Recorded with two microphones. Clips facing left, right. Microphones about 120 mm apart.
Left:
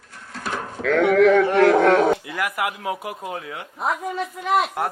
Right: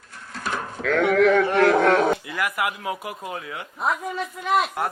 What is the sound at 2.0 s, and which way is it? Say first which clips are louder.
A woman's voice: left 2 dB; 45° left (ahead or behind).